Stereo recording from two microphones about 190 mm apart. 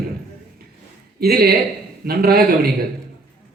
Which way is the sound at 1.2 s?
55° right (ahead or behind).